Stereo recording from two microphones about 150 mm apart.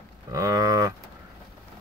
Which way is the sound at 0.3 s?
20° right (ahead or behind).